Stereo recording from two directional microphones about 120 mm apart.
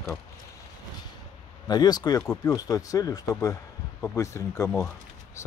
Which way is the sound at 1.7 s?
35° left (ahead or behind).